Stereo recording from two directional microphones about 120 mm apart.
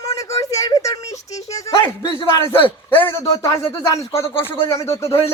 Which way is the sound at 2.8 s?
15° left (ahead or behind).